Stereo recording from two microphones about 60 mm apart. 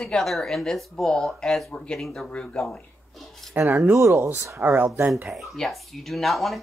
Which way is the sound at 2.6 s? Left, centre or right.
Centre.